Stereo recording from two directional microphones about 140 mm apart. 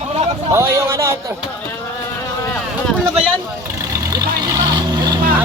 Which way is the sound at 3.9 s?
25° right (ahead or behind).